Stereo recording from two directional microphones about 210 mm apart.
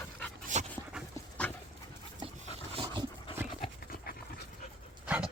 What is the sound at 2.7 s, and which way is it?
Dog, 20° right (ahead or behind).